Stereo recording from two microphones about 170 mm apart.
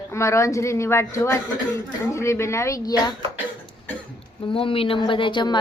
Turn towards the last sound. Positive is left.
turn(degrees=25)  # may be behind; listen again after turning